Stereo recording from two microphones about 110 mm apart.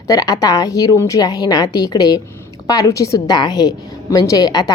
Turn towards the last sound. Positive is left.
turn(degrees=35)  # may be behind; listen again after turning